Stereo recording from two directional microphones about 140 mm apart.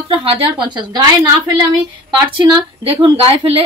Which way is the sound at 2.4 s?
30° right (ahead or behind).